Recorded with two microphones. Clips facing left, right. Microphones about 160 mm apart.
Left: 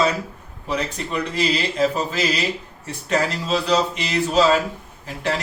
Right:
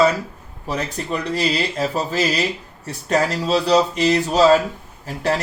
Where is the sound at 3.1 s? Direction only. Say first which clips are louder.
Right 3 dB; 40° right (ahead or behind).